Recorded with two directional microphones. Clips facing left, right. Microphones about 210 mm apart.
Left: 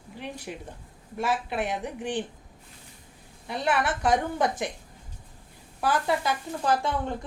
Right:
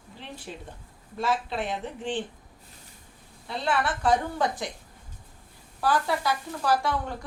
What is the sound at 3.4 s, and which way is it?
Speech, 15° left (ahead or behind).